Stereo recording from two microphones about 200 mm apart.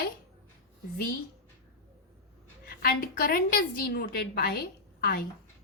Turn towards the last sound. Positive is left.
turn(degrees=50)  # may be behind; listen again after turning